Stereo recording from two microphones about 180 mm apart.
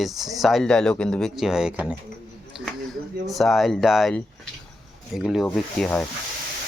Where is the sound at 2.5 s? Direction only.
5° right (ahead or behind).